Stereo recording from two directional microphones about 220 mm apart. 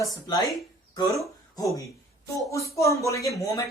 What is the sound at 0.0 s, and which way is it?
Speech, 15° left (ahead or behind).